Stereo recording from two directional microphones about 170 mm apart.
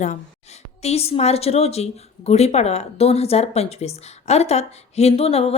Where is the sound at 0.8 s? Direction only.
40° left (ahead or behind).